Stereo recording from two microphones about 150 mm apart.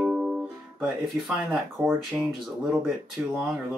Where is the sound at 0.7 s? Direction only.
Centre (ahead or behind).